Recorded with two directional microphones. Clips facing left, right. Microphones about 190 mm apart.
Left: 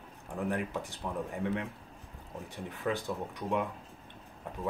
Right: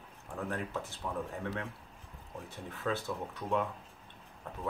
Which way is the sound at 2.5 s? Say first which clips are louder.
Left 2 dB; 15° left (ahead or behind).